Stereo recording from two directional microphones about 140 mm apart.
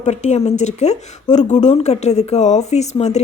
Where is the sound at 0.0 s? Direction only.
55° left (ahead or behind).